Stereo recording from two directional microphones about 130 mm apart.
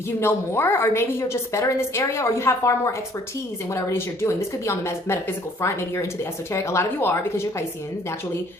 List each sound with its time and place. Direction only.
0.2 s a woman's voice: 20° left (ahead or behind)